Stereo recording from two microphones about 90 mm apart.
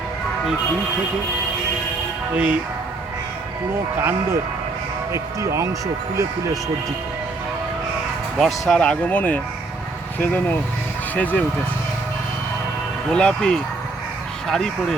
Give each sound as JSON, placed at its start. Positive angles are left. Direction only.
{"t": 2.3, "sound": "speech", "side_deg": -15}
{"t": 5.1, "sound": "speech", "side_deg": -35}
{"t": 8.4, "sound": "speech", "side_deg": 0}
{"t": 8.8, "sound": "speech", "side_deg": 15}
{"t": 13.1, "sound": "speech", "side_deg": 10}